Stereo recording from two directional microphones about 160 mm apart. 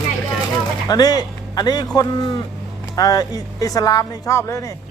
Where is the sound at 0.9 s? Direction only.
25° left (ahead or behind).